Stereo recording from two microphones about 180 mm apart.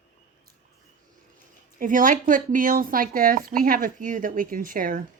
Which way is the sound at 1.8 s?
45° right (ahead or behind).